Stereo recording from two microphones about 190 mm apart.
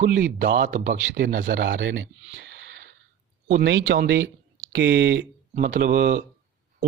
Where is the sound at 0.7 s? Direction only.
40° right (ahead or behind).